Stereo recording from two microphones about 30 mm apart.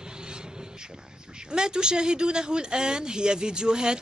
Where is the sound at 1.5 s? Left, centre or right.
Right.